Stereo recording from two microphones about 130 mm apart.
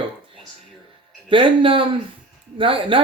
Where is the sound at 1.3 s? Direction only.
40° right (ahead or behind).